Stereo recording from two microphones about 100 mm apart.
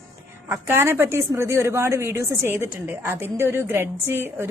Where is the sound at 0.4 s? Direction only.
25° right (ahead or behind).